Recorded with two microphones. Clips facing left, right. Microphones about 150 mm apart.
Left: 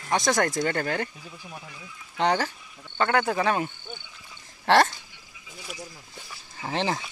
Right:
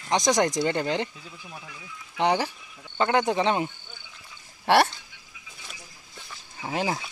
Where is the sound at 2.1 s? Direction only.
15° right (ahead or behind).